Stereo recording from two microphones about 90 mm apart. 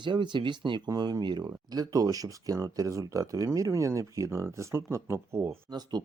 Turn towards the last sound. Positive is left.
turn(degrees=-50)  # may be behind; listen again after turning